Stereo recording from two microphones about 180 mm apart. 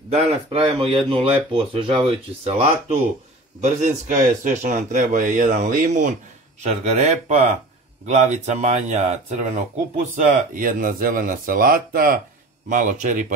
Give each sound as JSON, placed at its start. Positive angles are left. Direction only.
{"t": 0.1, "sound": "speech", "side_deg": -30}